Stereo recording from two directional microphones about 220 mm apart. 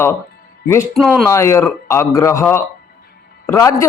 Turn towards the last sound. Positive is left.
turn(degrees=15)  # may be behind; listen again after turning